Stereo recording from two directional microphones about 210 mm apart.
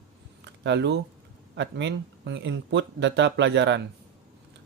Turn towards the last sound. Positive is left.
turn(degrees=-60)  # may be behind; listen again after turning